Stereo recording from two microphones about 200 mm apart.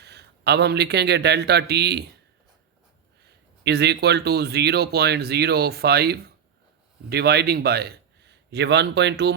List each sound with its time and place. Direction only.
0.0 s a man's voice: 55° right (ahead or behind)
3.6 s a man's voice: 55° right (ahead or behind)